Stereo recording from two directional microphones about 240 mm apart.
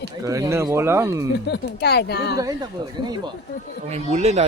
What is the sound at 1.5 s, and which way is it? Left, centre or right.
Speech, left.